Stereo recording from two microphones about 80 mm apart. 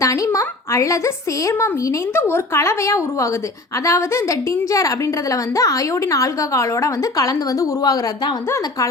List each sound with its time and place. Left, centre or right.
0.0 s a woman's voice: left
8.4 s speech: left